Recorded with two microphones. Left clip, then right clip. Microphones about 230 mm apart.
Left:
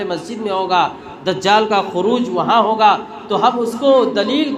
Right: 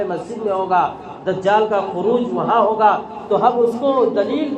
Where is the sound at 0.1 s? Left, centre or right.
Left.